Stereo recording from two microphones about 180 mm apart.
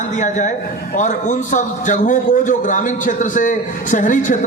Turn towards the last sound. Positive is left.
turn(degrees=45)  # may be behind; listen again after turning